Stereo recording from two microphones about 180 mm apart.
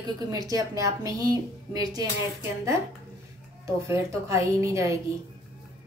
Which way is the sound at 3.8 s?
15° right (ahead or behind).